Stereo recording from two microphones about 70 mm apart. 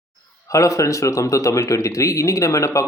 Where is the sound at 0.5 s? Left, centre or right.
Left.